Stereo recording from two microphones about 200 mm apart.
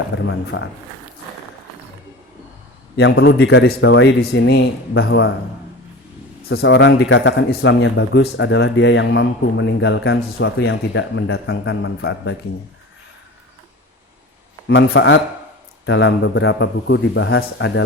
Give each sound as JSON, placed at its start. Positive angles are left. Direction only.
{"t": 0.3, "sound": "a man's voice", "side_deg": 70}
{"t": 2.9, "sound": "speech", "side_deg": 60}
{"t": 6.5, "sound": "speech", "side_deg": 60}
{"t": 14.7, "sound": "a man's voice", "side_deg": 65}